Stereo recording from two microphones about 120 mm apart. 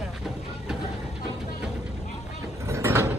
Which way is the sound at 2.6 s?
25° right (ahead or behind).